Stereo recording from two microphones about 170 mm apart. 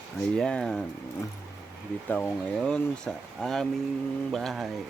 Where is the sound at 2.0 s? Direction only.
10° left (ahead or behind).